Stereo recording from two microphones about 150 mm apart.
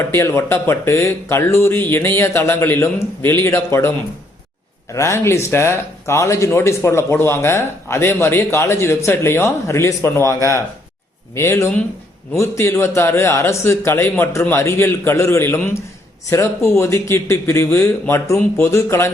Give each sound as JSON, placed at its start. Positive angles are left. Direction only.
{"t": 0.0, "sound": "speech", "side_deg": 15}
{"t": 4.9, "sound": "speech", "side_deg": 20}